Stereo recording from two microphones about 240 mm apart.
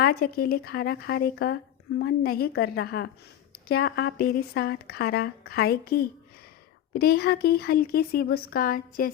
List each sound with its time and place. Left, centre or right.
0.0 s a woman's voice: left